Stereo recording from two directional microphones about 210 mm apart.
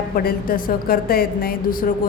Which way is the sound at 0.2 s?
45° left (ahead or behind).